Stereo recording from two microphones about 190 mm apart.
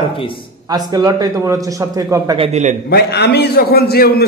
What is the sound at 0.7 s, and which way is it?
A man's voice, 20° right (ahead or behind).